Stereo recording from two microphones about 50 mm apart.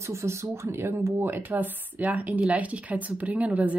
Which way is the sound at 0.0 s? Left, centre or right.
Right.